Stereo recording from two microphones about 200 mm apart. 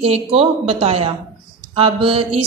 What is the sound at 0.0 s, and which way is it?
A woman's voice, 30° right (ahead or behind).